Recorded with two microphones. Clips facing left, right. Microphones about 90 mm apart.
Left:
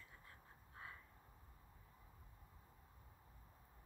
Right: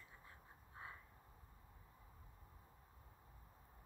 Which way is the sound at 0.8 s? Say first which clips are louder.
Right 1 dB; 20° right (ahead or behind).